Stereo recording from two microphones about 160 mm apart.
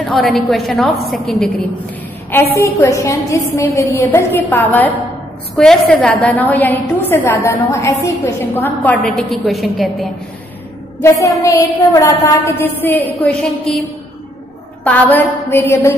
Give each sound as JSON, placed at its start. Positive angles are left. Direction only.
{"t": 0.1, "sound": "a woman's voice", "side_deg": 0}
{"t": 2.3, "sound": "a woman's voice", "side_deg": 15}
{"t": 11.0, "sound": "a woman's voice", "side_deg": 20}
{"t": 14.9, "sound": "a woman's voice", "side_deg": 10}